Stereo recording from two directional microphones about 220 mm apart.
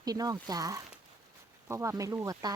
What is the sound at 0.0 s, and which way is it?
Speech, 15° right (ahead or behind).